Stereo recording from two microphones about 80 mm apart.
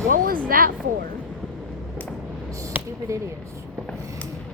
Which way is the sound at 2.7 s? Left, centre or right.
Right.